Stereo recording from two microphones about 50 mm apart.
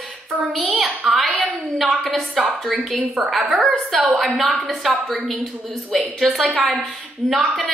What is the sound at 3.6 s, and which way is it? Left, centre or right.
A woman's voice, centre.